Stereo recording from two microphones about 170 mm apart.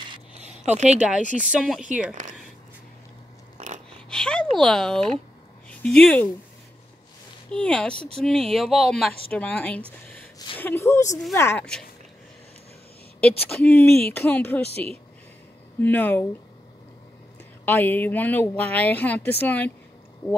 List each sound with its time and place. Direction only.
0.3 s a sound: 40° right (ahead or behind)
1.5 s speech: 5° right (ahead or behind)
3.5 s a sound: 45° right (ahead or behind)
4.1 s a sound: 5° left (ahead or behind)
5.8 s speech: 5° left (ahead or behind)
7.5 s speech: 5° left (ahead or behind)
13.5 s speech: 5° left (ahead or behind)
15.8 s speech: 10° left (ahead or behind)
17.6 s speech: 10° left (ahead or behind)